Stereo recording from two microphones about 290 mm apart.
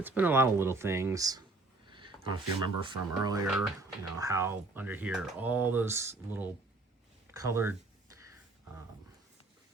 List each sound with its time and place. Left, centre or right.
0.0 s speech: centre
1.9 s a sound: centre
2.8 s speech: centre
3.4 s speech: centre